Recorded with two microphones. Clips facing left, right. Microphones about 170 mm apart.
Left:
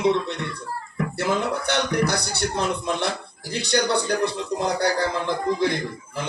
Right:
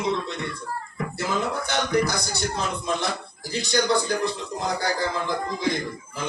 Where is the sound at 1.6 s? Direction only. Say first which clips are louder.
Left 1 dB; 70° left (ahead or behind).